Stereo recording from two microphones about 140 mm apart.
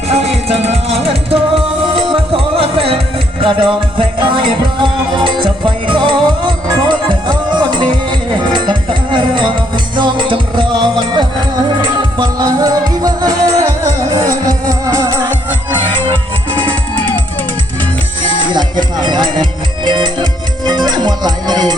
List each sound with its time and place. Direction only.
0.1 s music: 45° right (ahead or behind)
11.8 s music: 30° right (ahead or behind)
15.7 s music: 35° right (ahead or behind)
18.4 s music: 30° right (ahead or behind)